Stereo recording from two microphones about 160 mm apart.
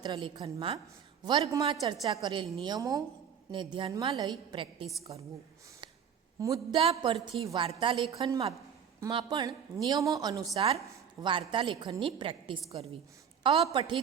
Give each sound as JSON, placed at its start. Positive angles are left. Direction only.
{"t": 0.0, "sound": "a woman's voice", "side_deg": -30}
{"t": 6.4, "sound": "a woman's voice", "side_deg": -20}
{"t": 6.7, "sound": "a woman's voice", "side_deg": -35}